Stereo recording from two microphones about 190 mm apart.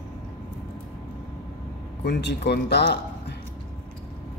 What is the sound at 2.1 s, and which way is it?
Speech, 65° left (ahead or behind).